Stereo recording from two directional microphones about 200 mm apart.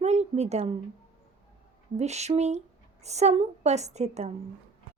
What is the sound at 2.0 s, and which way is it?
A woman's voice, 35° right (ahead or behind).